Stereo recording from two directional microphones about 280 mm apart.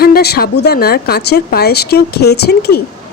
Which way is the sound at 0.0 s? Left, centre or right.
Left.